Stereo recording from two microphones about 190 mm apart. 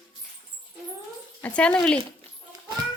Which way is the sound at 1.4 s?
5° left (ahead or behind).